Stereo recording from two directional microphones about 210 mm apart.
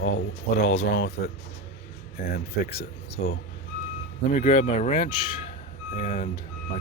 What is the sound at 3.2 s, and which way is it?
Speech, 40° left (ahead or behind).